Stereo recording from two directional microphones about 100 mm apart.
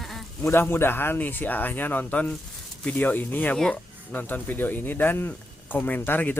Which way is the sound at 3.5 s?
5° left (ahead or behind).